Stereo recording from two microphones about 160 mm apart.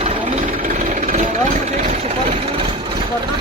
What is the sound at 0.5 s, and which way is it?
Vehicle, 60° right (ahead or behind).